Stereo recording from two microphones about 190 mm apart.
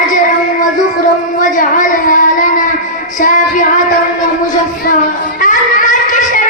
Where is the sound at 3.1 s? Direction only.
45° left (ahead or behind).